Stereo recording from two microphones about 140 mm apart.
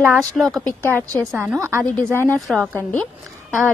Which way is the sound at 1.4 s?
15° right (ahead or behind).